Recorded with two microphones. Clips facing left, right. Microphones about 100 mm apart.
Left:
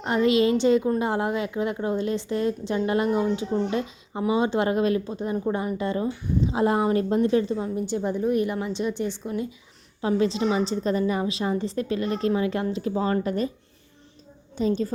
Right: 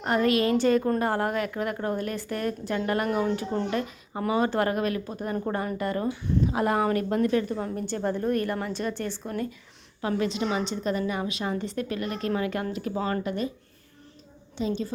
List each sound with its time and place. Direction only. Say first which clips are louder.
0.0 s a woman's voice: left 3 dB; 20° left (ahead or behind)
5.3 s a woman's voice: left 2 dB; 15° left (ahead or behind)
7.6 s speech: left 2 dB; 15° left (ahead or behind)
10.0 s a woman's voice: left 4 dB; 25° left (ahead or behind)
14.6 s speech: left 5 dB; 40° left (ahead or behind)